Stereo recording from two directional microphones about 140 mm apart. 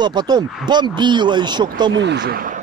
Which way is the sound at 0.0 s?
30° right (ahead or behind).